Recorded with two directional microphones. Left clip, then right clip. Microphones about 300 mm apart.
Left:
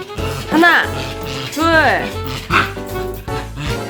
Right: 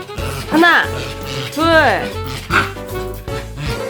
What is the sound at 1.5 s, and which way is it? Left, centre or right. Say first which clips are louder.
Music: right 1 dB; centre.